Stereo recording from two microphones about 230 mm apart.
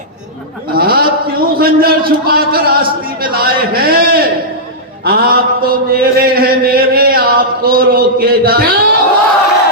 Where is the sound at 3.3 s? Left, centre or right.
Right.